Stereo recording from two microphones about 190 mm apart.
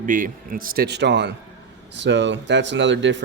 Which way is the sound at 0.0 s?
45° right (ahead or behind).